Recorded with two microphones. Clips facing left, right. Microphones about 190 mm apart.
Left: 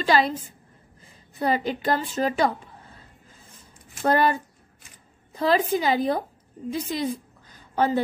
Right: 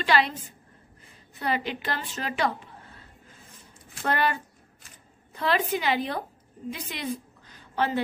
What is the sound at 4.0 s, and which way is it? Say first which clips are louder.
A woman's voice: left 5 dB; 40° left (ahead or behind).